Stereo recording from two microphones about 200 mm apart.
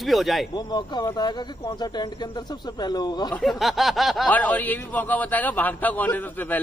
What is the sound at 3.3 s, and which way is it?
Speech, centre (ahead or behind).